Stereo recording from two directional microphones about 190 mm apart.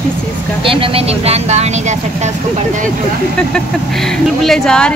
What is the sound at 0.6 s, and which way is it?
Speech, 30° right (ahead or behind).